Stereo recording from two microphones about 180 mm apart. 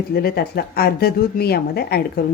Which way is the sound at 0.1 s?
60° left (ahead or behind).